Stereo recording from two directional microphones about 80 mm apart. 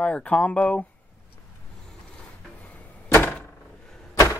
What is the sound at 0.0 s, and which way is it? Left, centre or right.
Speech, centre.